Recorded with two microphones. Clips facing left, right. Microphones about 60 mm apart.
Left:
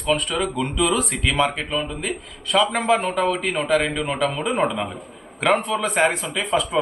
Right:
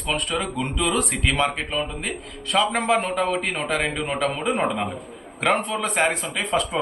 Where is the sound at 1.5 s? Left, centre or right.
Centre.